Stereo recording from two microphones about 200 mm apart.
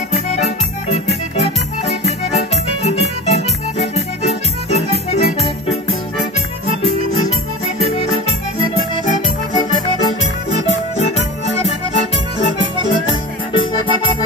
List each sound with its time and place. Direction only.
0.1 s accordion: 35° left (ahead or behind)
1.3 s music: 35° left (ahead or behind)
11.0 s music: 30° left (ahead or behind)